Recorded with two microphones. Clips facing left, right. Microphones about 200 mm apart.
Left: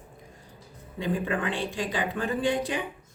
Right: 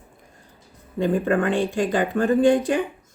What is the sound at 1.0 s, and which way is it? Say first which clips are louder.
Speech: right 8 dB; 50° right (ahead or behind).